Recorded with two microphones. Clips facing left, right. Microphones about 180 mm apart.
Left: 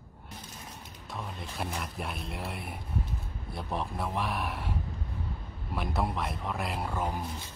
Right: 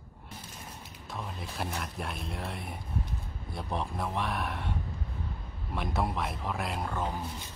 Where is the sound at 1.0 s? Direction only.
Centre (ahead or behind).